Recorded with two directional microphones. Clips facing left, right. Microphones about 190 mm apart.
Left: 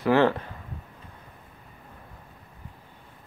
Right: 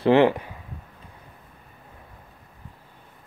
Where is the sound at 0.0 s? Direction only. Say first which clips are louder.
Right 4 dB; 20° right (ahead or behind).